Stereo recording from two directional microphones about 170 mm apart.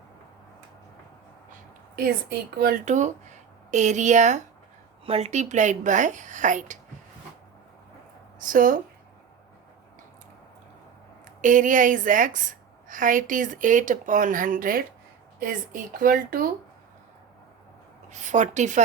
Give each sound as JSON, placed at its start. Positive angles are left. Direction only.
{"t": 2.6, "sound": "a woman's voice", "side_deg": -55}
{"t": 8.4, "sound": "speech", "side_deg": -55}
{"t": 11.3, "sound": "a woman's voice", "side_deg": -50}
{"t": 18.1, "sound": "a woman's voice", "side_deg": -45}